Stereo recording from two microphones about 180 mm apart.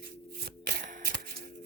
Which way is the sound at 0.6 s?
55° right (ahead or behind).